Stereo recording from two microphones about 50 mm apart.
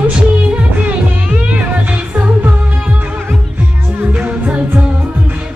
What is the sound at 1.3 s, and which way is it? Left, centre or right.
Music, right.